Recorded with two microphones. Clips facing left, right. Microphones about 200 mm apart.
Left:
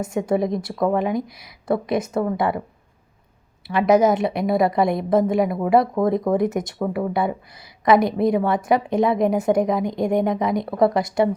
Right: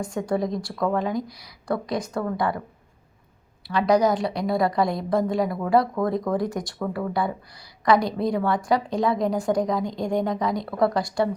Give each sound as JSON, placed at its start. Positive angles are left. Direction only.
{"t": 0.0, "sound": "a woman's voice", "side_deg": 20}
{"t": 3.7, "sound": "a woman's voice", "side_deg": 20}